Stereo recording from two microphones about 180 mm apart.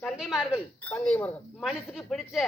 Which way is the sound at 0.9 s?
10° left (ahead or behind).